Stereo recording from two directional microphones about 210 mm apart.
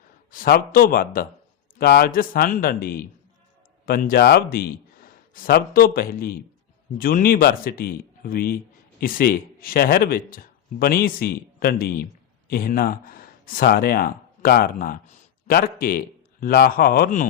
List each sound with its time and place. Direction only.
0.3 s speech: 45° left (ahead or behind)